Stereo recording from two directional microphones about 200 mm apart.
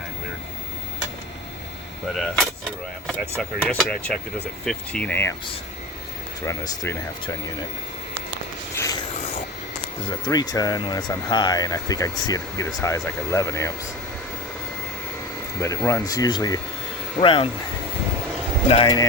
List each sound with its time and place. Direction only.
2.1 s speech: centre (ahead or behind)
3.6 s speech: 5° left (ahead or behind)
6.4 s speech: 15° left (ahead or behind)
8.7 s rub: 15° left (ahead or behind)
10.1 s speech: 20° left (ahead or behind)
15.6 s speech: 15° left (ahead or behind)
18.7 s speech: 25° left (ahead or behind)